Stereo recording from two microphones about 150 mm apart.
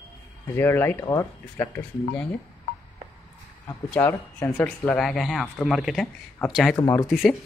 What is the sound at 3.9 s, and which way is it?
Speech, 15° left (ahead or behind).